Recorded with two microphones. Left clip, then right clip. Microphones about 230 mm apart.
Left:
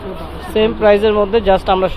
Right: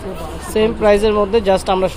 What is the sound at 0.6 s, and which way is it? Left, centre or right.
Speech, right.